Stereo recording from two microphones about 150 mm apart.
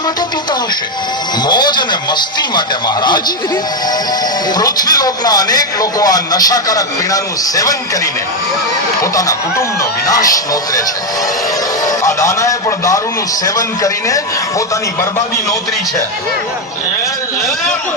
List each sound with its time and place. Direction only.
1.5 s speech: 30° left (ahead or behind)
4.5 s speech: 25° left (ahead or behind)
9.0 s speech: 25° left (ahead or behind)
11.9 s speech: 20° left (ahead or behind)